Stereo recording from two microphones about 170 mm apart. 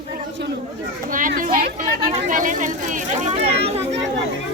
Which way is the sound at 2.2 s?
50° right (ahead or behind).